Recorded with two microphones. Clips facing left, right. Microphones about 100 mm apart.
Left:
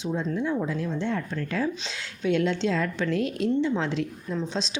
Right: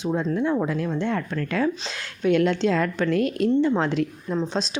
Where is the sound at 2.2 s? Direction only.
55° right (ahead or behind).